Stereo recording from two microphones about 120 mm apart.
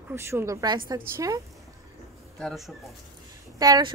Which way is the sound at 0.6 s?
35° right (ahead or behind).